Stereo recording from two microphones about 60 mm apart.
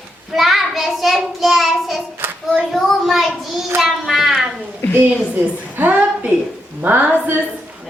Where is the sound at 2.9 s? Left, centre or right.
Centre.